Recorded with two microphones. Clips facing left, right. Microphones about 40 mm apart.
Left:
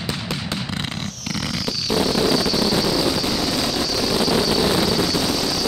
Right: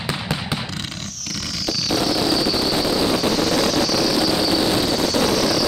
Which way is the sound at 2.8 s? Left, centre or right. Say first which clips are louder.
Right 1 dB; centre.